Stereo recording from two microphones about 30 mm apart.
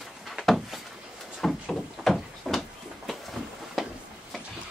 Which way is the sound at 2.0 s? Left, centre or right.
Centre.